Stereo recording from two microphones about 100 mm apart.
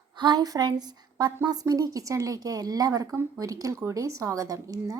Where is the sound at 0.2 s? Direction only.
45° right (ahead or behind).